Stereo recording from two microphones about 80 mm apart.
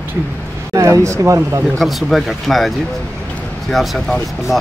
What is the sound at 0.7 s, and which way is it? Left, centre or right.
Speech, right.